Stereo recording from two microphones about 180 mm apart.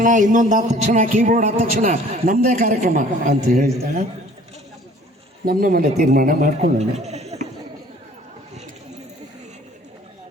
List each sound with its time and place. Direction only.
0.0 s a man's voice: 45° right (ahead or behind)
5.5 s a man's voice: 50° right (ahead or behind)
6.9 s bleat: 40° right (ahead or behind)